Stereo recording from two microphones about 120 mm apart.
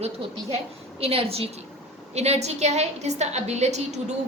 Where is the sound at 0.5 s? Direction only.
55° right (ahead or behind).